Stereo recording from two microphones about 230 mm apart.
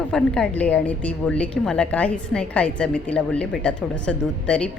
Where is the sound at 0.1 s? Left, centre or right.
Centre.